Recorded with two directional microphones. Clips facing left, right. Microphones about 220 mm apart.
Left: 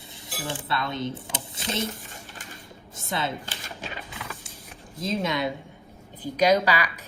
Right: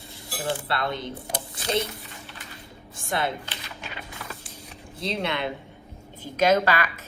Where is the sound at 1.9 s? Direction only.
45° left (ahead or behind).